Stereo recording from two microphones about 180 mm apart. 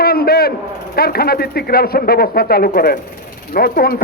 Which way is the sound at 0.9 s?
60° left (ahead or behind).